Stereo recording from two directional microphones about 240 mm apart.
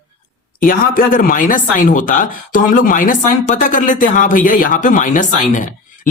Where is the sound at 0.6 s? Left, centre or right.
Left.